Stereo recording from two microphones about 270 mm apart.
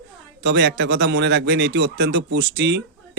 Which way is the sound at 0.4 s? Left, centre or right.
Right.